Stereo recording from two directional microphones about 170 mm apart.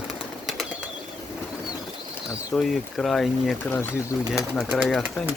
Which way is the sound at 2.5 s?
Centre (ahead or behind).